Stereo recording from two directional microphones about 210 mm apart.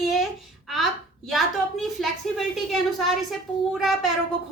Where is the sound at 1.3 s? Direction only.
Centre (ahead or behind).